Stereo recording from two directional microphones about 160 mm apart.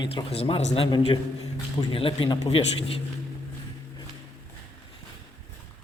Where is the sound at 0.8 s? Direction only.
30° left (ahead or behind).